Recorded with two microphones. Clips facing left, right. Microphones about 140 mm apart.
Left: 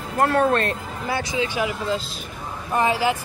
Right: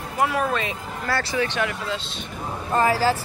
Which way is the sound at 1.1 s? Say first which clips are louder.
Even; 15° left (ahead or behind).